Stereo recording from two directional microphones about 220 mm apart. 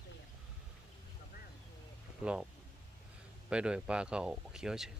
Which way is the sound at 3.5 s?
5° right (ahead or behind).